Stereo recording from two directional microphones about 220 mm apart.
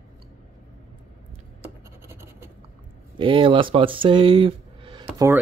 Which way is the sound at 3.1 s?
25° right (ahead or behind).